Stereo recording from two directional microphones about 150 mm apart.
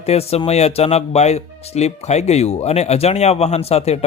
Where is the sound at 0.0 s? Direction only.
45° left (ahead or behind).